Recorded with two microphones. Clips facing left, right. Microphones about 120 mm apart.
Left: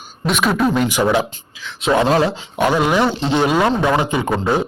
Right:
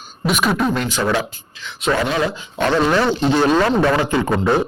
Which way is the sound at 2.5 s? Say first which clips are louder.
Even; 10° left (ahead or behind).